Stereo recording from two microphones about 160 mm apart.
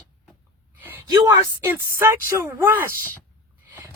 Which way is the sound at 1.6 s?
15° right (ahead or behind).